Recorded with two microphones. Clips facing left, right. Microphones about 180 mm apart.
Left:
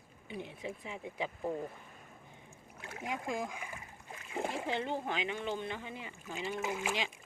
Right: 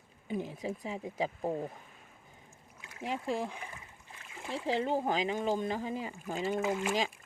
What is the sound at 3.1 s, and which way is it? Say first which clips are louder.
Speech: right 3 dB; 30° right (ahead or behind).